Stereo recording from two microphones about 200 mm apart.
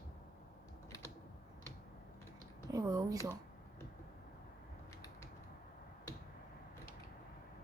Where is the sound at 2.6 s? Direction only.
15° right (ahead or behind).